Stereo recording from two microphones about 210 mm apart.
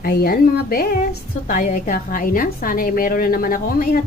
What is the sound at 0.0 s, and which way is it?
A woman's voice, 45° left (ahead or behind).